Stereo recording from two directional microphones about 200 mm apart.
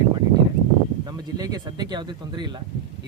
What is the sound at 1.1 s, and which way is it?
Speech, 20° right (ahead or behind).